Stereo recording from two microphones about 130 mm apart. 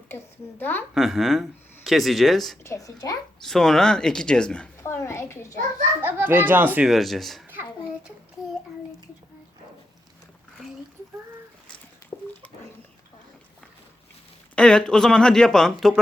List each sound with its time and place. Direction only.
0.6 s a woman's voice: 15° left (ahead or behind)
0.9 s speech: centre (ahead or behind)
2.6 s a child's voice: 25° left (ahead or behind)
3.4 s speech: centre (ahead or behind)
4.8 s a child's voice: 20° left (ahead or behind)
6.0 s speech: 15° right (ahead or behind)
6.8 s speech: centre (ahead or behind)
14.5 s speech: 5° left (ahead or behind)